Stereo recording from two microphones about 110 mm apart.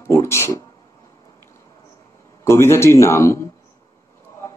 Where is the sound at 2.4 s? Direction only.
25° left (ahead or behind).